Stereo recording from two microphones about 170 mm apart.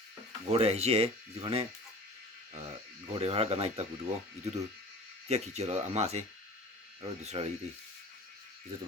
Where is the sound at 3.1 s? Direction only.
35° right (ahead or behind).